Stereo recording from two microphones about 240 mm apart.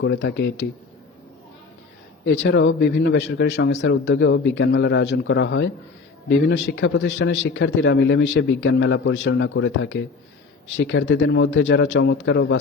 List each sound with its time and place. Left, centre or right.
0.0 s a man's voice: left
2.2 s a man's voice: left